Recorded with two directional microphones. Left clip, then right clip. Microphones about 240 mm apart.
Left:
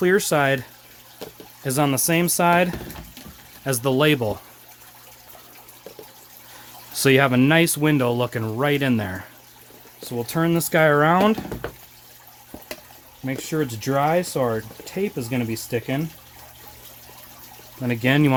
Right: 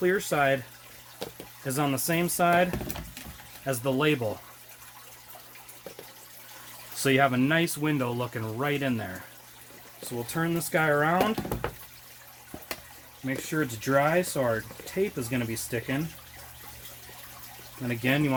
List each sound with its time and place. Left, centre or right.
0.0 s speech: left
1.6 s speech: left
7.0 s speech: left
10.2 s speech: left
13.2 s speech: left
17.8 s speech: left